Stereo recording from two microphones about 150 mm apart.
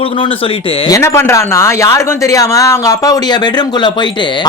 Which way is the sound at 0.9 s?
15° left (ahead or behind).